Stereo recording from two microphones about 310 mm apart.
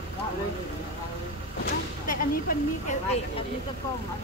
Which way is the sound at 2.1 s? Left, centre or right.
Left.